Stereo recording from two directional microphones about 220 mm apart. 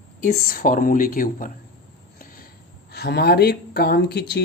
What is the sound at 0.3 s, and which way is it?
Speech, 40° left (ahead or behind).